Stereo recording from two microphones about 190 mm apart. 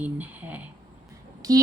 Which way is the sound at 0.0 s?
10° right (ahead or behind).